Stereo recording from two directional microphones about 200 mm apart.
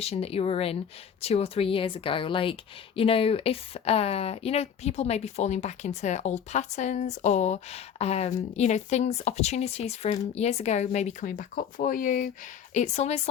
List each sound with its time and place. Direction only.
0.0 s speech: 30° left (ahead or behind)